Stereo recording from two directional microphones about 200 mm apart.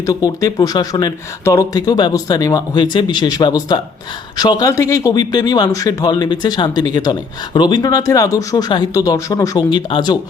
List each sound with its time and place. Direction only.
0.0 s speech: 15° left (ahead or behind)